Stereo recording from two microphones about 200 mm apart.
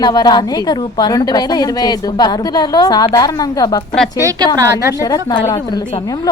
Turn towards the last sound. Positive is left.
turn(degrees=20)  # may be behind; listen again after turning